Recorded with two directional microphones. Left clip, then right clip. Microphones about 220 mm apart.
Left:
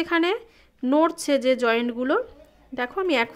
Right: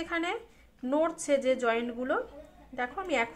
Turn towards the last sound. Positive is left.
turn(degrees=45)  # may be behind; listen again after turning